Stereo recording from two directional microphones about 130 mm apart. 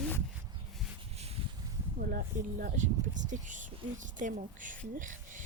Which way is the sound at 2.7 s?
75° right (ahead or behind).